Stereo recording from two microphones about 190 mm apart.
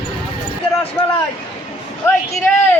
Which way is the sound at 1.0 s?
20° left (ahead or behind).